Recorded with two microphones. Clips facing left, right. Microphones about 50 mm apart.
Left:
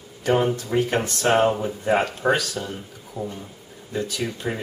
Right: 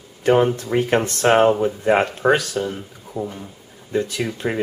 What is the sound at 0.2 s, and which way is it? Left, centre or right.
Speech, right.